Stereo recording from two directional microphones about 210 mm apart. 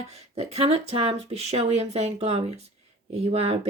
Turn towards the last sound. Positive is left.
turn(degrees=-30)  # may be behind; listen again after turning